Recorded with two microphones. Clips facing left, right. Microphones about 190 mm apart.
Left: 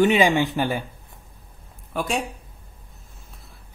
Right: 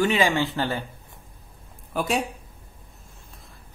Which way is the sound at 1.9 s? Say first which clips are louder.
Right 1 dB; centre (ahead or behind).